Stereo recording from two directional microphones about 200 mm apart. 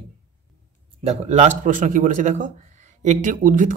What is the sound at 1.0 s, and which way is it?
Speech, 35° right (ahead or behind).